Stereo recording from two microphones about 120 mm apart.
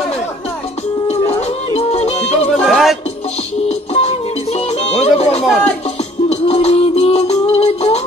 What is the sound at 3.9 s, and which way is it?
Music, 65° left (ahead or behind).